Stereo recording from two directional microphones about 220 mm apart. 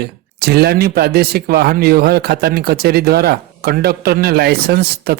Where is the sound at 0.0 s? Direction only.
45° right (ahead or behind).